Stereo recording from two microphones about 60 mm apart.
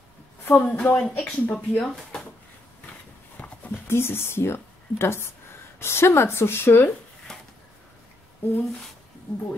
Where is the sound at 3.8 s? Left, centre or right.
Left.